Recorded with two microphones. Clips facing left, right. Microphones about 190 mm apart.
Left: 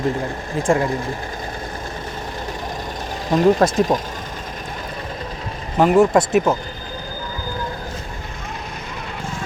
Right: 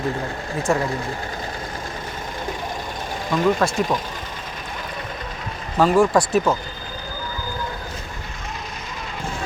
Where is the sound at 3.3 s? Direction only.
35° left (ahead or behind).